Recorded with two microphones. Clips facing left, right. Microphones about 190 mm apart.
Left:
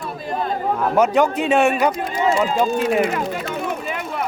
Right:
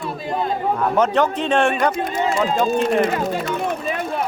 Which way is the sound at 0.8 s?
10° left (ahead or behind).